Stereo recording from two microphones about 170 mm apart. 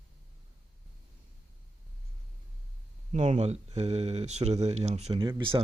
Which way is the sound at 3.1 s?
40° right (ahead or behind).